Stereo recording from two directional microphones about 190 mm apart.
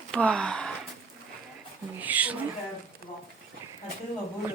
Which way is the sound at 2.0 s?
10° right (ahead or behind).